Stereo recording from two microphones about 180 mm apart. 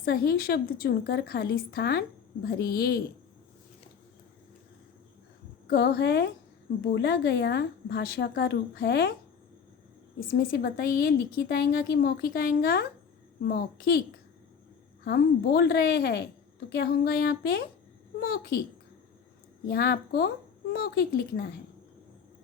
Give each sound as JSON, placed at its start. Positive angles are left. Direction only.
{"t": 0.0, "sound": "a woman's voice", "side_deg": 55}
{"t": 5.6, "sound": "a woman's voice", "side_deg": 60}
{"t": 10.2, "sound": "a woman's voice", "side_deg": 55}
{"t": 15.0, "sound": "a woman's voice", "side_deg": 60}
{"t": 19.7, "sound": "a woman's voice", "side_deg": 60}